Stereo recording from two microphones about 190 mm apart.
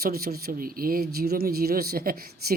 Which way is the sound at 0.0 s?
55° right (ahead or behind).